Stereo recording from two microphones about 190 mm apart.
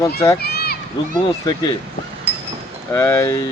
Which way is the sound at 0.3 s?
55° left (ahead or behind).